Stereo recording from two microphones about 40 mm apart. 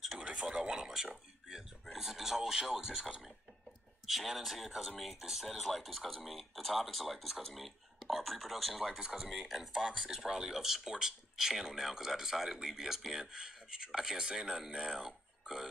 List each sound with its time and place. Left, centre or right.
0.2 s speech: right
1.9 s speech: centre
4.0 s speech: centre
14.9 s burping: centre